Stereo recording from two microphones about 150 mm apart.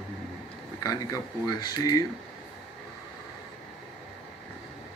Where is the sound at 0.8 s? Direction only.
25° left (ahead or behind).